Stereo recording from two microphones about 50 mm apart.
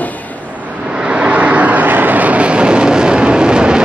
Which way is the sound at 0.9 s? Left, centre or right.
Right.